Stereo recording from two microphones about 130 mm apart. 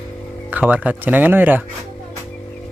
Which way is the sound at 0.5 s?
10° right (ahead or behind).